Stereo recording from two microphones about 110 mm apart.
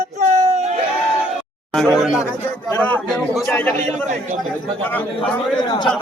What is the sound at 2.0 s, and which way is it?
Speech, centre (ahead or behind).